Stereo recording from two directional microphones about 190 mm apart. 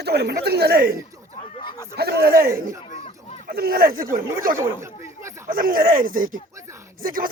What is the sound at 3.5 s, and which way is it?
Speech, 55° right (ahead or behind).